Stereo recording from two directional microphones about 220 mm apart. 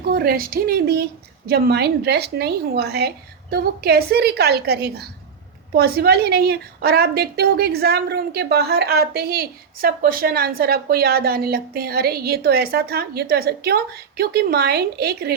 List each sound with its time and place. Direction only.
0.1 s a woman's voice: 45° right (ahead or behind)